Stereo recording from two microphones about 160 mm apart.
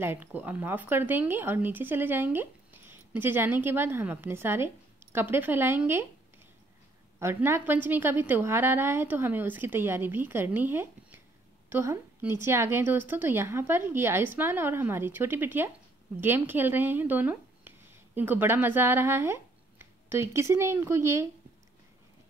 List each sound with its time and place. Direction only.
0.0 s speech: 10° right (ahead or behind)
7.2 s speech: 15° right (ahead or behind)